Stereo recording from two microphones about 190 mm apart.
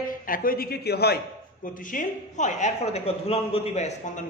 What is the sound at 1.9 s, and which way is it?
A woman's voice, 40° left (ahead or behind).